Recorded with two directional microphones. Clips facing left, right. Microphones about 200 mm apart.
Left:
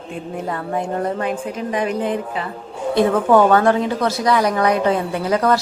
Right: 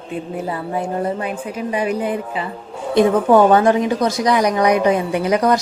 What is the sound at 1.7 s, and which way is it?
A woman's voice, 10° right (ahead or behind).